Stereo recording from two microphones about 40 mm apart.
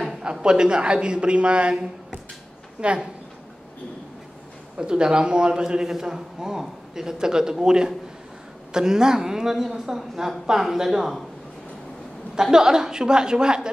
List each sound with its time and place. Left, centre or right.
0.2 s a man's voice: right
4.7 s a man's voice: right
12.4 s a woman's voice: centre